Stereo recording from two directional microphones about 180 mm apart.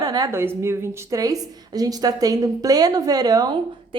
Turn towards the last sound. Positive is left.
turn(degrees=-20)  # may be behind; listen again after turning